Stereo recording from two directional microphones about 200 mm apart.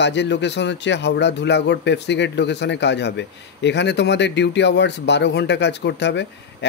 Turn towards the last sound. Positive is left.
turn(degrees=60)  # may be behind; listen again after turning